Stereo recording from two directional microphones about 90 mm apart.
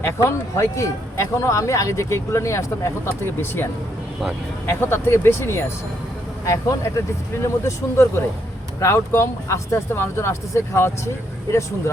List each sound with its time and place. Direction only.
0.0 s speech: 30° left (ahead or behind)